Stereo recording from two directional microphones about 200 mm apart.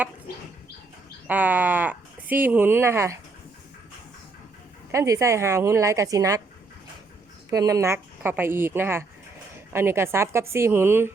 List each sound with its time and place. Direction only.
1.3 s speech: 10° right (ahead or behind)
4.9 s speech: 15° right (ahead or behind)
7.5 s speech: 15° right (ahead or behind)